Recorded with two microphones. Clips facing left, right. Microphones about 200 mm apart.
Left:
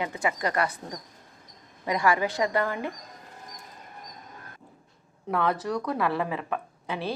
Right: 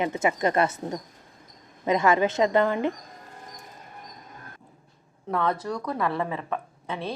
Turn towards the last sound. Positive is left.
turn(degrees=5)  # may be behind; listen again after turning